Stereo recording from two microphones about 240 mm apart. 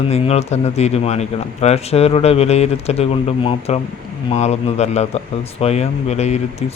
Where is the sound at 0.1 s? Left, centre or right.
Left.